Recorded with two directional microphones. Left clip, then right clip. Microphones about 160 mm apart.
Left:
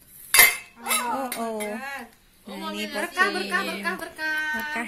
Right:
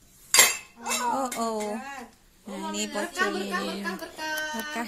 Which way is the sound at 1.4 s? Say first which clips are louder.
Even; 10° right (ahead or behind).